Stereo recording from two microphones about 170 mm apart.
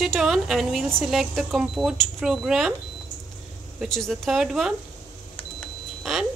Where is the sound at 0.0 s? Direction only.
Centre (ahead or behind).